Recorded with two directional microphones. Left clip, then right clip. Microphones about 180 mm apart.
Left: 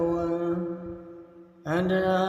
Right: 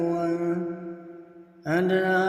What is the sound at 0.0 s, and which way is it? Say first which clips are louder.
Mantra: right 1 dB; 15° right (ahead or behind).